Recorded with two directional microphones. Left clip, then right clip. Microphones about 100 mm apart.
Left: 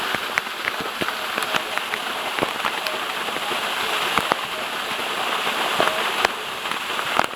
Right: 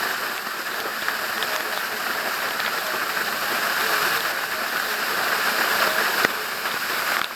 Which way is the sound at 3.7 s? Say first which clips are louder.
Right 3 dB; 35° right (ahead or behind).